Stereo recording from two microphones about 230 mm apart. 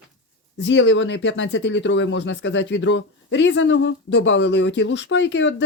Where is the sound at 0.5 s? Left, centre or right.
Left.